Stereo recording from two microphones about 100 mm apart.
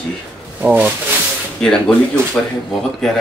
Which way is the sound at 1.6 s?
5° left (ahead or behind).